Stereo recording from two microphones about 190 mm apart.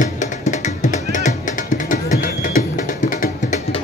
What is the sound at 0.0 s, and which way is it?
Music, 40° left (ahead or behind).